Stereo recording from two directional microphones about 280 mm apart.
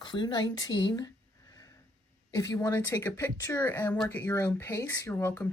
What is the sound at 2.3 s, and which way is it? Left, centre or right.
Speech, centre.